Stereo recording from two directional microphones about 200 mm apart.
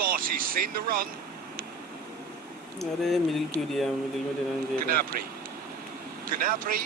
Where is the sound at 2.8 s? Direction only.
Centre (ahead or behind).